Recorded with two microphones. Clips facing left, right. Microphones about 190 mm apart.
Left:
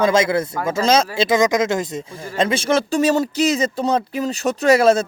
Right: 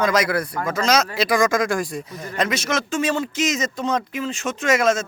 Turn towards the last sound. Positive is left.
turn(degrees=35)  # may be behind; listen again after turning